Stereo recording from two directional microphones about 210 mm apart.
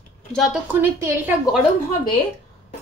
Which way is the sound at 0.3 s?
Centre (ahead or behind).